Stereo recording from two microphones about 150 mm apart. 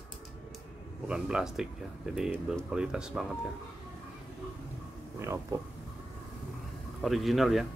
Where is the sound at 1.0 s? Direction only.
5° right (ahead or behind).